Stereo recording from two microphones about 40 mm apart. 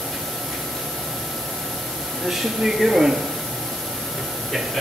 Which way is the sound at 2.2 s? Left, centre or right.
Centre.